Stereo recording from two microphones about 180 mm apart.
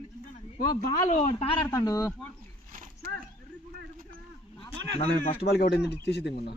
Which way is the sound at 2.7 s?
45° right (ahead or behind).